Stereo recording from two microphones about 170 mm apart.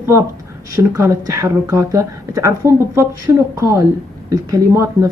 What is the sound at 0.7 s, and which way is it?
Speech, 15° right (ahead or behind).